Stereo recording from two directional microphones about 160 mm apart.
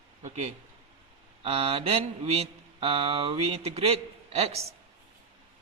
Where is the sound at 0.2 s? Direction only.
50° right (ahead or behind).